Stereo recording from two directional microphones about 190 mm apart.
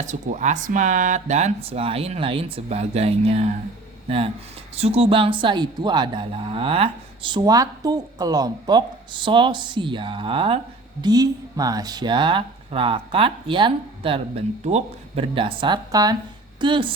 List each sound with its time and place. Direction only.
0.0 s speech: 40° right (ahead or behind)
4.7 s speech: 30° right (ahead or behind)